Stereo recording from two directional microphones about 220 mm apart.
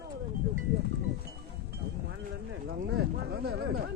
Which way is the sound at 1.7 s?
50° right (ahead or behind).